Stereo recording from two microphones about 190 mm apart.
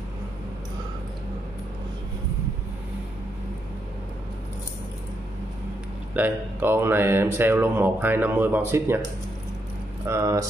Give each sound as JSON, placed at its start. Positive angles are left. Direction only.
{"t": 6.1, "sound": "speech", "side_deg": -10}
{"t": 10.0, "sound": "speech", "side_deg": -15}